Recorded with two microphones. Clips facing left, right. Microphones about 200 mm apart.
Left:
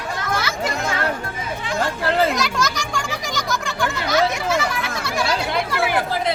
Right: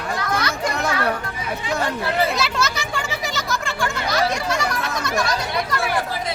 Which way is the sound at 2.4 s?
5° right (ahead or behind).